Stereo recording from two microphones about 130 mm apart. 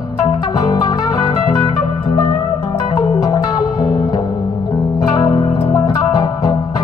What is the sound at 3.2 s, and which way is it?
Music, 30° left (ahead or behind).